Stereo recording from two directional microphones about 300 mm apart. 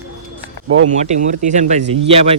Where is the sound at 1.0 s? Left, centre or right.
Right.